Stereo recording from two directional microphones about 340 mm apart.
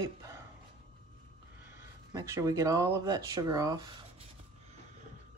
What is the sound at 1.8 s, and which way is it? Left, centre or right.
Speech, centre.